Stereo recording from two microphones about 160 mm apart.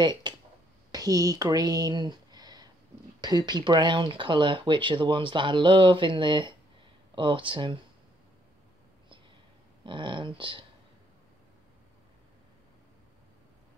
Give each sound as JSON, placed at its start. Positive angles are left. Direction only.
{"t": 0.0, "sound": "speech", "side_deg": -25}
{"t": 9.8, "sound": "speech", "side_deg": -30}